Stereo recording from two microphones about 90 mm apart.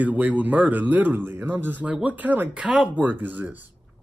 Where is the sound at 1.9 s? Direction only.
15° right (ahead or behind).